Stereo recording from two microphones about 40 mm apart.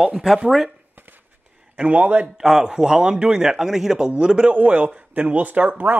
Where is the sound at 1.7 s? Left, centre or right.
Right.